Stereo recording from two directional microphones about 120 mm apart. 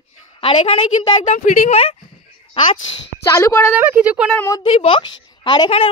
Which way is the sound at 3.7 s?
15° right (ahead or behind).